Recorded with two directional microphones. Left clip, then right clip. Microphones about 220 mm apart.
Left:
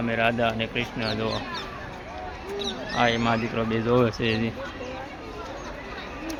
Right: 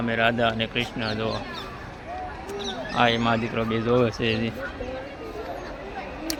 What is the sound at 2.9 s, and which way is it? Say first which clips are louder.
Speech: right 1 dB; 5° right (ahead or behind).